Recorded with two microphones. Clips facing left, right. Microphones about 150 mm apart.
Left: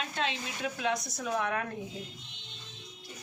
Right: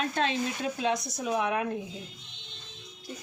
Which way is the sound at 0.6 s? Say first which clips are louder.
Left 1 dB; 25° right (ahead or behind).